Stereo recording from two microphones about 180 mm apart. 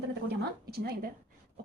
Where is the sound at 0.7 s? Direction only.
60° right (ahead or behind).